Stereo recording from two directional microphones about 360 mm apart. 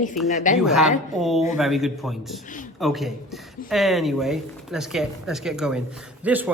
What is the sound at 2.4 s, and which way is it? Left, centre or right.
Speech, left.